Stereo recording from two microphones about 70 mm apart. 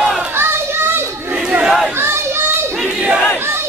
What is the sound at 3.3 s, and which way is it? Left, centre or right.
Battle cry, right.